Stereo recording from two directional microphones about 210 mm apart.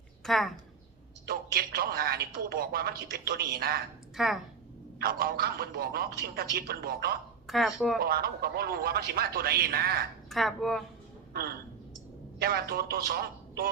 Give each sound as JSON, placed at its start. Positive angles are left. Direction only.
{"t": 0.3, "sound": "speech", "side_deg": 0}
{"t": 1.3, "sound": "speech", "side_deg": -45}
{"t": 4.2, "sound": "speech", "side_deg": 0}
{"t": 5.0, "sound": "speech", "side_deg": -45}
{"t": 7.4, "sound": "speech", "side_deg": 0}
{"t": 7.9, "sound": "speech", "side_deg": -45}
{"t": 10.2, "sound": "speech", "side_deg": 0}
{"t": 12.4, "sound": "speech", "side_deg": -45}